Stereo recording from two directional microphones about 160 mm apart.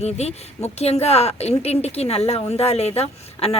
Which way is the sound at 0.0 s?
40° left (ahead or behind).